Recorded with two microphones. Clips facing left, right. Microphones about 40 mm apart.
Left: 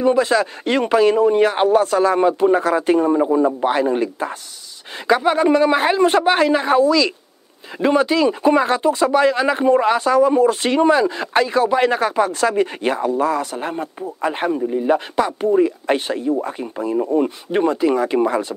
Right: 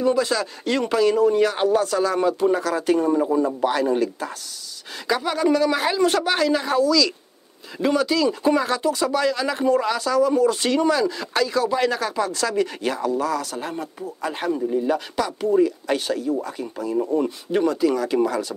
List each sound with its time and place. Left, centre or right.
0.0 s speech: left